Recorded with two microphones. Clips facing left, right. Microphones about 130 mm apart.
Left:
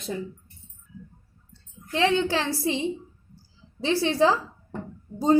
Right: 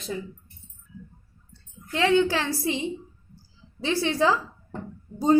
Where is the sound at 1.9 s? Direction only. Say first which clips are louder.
Right 2 dB; 25° left (ahead or behind).